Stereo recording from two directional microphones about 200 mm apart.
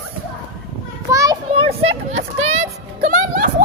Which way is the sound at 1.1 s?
15° right (ahead or behind).